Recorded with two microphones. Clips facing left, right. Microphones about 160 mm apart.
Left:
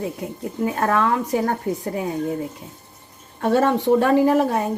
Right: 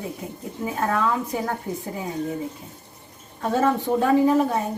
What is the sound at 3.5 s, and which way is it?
Speech, 70° left (ahead or behind).